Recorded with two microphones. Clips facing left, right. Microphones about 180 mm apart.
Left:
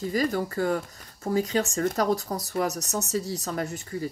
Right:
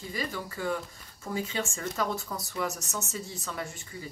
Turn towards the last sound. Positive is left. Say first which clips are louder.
# left 7 dB
turn(degrees=40)  # may be behind; listen again after turning